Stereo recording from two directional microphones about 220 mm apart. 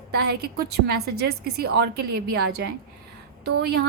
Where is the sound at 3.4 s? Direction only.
50° right (ahead or behind).